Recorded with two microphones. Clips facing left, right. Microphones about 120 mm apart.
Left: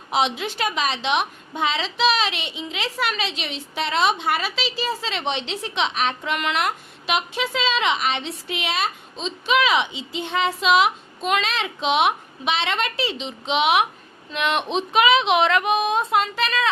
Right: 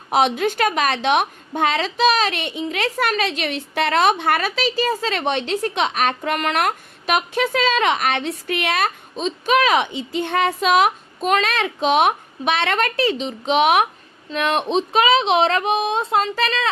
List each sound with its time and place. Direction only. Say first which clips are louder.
0.1 s a woman's voice: right 5 dB; 50° right (ahead or behind); by 16.6 s 35° right (ahead or behind)